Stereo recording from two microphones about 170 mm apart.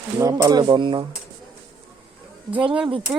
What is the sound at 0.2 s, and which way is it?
Speech, 20° right (ahead or behind).